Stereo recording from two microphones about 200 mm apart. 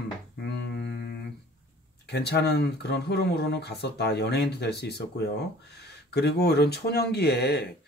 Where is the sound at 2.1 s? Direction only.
55° left (ahead or behind).